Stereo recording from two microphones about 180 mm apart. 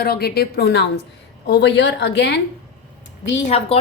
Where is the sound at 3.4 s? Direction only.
35° left (ahead or behind).